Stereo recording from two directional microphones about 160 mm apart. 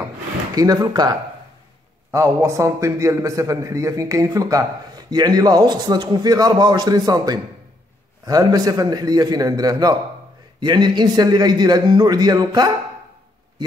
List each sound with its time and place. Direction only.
0.6 s a man's voice: 25° right (ahead or behind)